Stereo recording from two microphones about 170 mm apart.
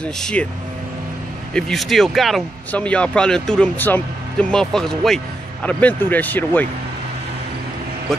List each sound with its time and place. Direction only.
0.0 s speech: 5° left (ahead or behind)
1.5 s speech: centre (ahead or behind)